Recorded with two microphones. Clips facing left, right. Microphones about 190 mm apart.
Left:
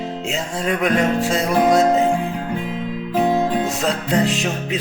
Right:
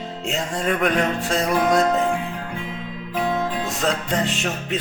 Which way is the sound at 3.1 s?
25° left (ahead or behind).